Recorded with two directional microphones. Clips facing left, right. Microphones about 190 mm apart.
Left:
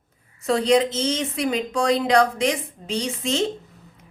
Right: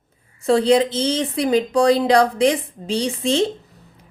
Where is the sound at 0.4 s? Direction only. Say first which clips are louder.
Right 3 dB; 30° right (ahead or behind).